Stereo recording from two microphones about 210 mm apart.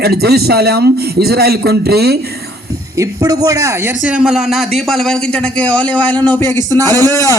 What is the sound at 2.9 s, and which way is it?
A man's voice, 15° right (ahead or behind).